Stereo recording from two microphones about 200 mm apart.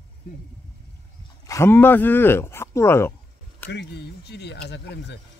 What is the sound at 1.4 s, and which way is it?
Speech, 15° left (ahead or behind).